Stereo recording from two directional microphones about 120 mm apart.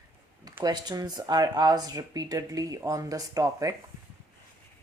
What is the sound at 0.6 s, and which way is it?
Speech, 35° right (ahead or behind).